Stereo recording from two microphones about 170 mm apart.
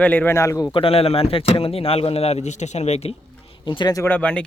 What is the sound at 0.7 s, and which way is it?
Speech, 35° left (ahead or behind).